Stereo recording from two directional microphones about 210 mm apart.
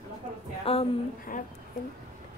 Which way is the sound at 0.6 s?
30° left (ahead or behind).